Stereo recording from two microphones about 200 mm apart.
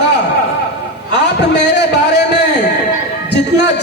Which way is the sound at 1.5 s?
60° left (ahead or behind).